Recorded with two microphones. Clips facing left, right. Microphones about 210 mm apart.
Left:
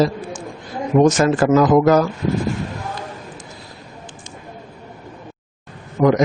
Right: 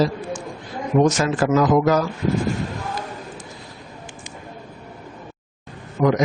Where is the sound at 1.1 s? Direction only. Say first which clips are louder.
Left 4 dB; 55° left (ahead or behind).